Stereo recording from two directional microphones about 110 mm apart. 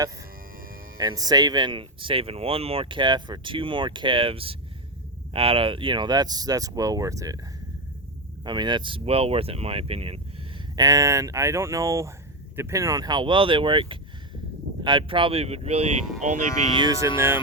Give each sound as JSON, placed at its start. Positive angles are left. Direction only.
{"t": 0.9, "sound": "speech", "side_deg": -35}
{"t": 8.4, "sound": "speech", "side_deg": -40}
{"t": 10.8, "sound": "speech", "side_deg": -30}
{"t": 16.8, "sound": "speech", "side_deg": -30}